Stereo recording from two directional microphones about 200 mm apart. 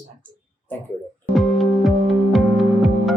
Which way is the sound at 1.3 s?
Centre (ahead or behind).